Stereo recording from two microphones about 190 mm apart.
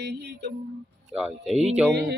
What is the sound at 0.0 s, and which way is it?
Speech, 65° right (ahead or behind).